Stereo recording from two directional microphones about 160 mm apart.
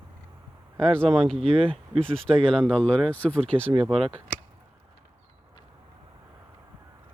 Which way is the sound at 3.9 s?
35° right (ahead or behind).